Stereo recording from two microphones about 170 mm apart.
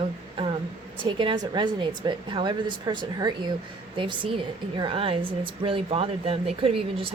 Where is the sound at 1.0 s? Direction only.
30° right (ahead or behind).